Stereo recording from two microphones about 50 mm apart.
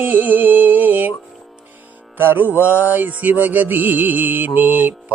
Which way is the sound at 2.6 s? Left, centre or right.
Right.